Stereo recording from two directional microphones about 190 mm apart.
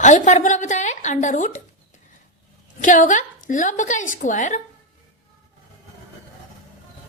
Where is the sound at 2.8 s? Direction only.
40° left (ahead or behind).